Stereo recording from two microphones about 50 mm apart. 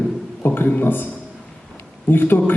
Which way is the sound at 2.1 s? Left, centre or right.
Left.